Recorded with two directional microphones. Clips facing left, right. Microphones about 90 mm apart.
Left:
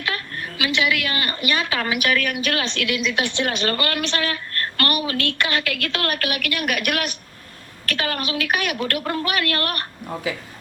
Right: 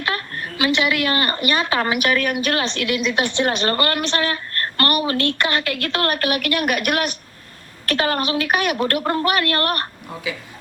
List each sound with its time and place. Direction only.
0.0 s a woman's voice: 40° right (ahead or behind)